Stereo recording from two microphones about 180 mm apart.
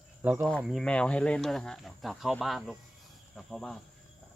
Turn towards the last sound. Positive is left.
turn(degrees=0)  # may be behind; listen again after turning